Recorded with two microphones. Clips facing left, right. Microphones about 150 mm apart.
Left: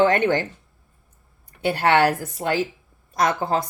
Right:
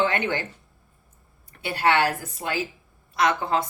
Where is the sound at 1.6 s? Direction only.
50° left (ahead or behind).